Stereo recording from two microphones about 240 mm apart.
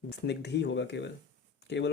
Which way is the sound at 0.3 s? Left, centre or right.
Left.